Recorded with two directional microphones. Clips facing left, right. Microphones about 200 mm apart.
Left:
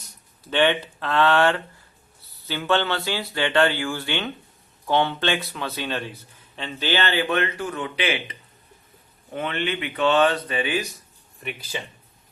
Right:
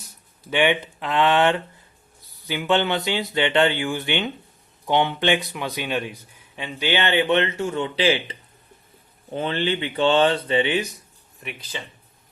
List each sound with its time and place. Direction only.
0.5 s a man's voice: 15° right (ahead or behind)